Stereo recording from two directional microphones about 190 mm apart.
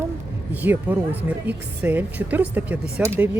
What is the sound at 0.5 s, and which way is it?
Speech, 10° right (ahead or behind).